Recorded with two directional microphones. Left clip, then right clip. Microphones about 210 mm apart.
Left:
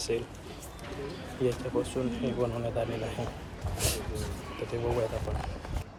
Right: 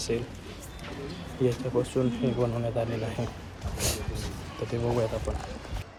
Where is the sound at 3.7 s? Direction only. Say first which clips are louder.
Right 1 dB; 10° left (ahead or behind).